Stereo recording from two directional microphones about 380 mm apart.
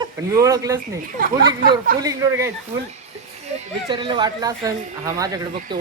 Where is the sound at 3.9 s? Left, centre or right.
Centre.